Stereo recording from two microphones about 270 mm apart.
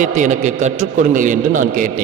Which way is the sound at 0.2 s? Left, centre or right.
Right.